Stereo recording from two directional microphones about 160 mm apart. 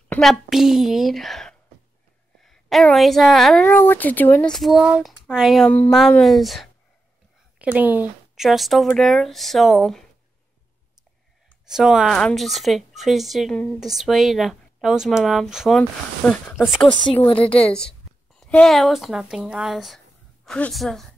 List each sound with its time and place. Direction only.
0.2 s speech: centre (ahead or behind)
8.5 s speech: centre (ahead or behind)
11.6 s speech: 5° right (ahead or behind)
18.1 s a sound: centre (ahead or behind)
18.4 s speech: 5° left (ahead or behind)